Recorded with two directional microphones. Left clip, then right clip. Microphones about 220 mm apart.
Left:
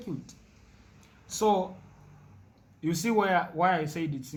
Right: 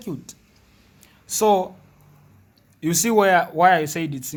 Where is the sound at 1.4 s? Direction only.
50° right (ahead or behind).